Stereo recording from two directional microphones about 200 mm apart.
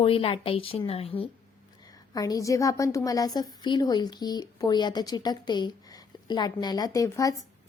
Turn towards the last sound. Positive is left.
turn(degrees=15)  # may be behind; listen again after turning